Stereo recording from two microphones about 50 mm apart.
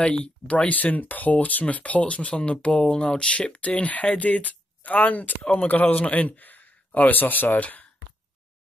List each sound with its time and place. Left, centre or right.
0.0 s a man's voice: left